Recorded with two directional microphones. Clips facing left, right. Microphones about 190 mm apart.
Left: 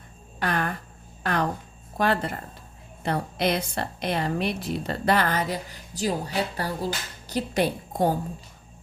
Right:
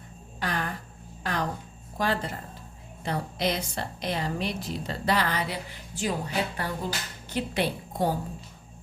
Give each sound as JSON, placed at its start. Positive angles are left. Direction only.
{"t": 0.3, "sound": "a woman's voice", "side_deg": 60}